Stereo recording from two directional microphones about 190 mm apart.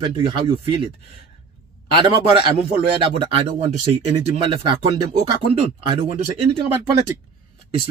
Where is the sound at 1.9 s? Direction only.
25° right (ahead or behind).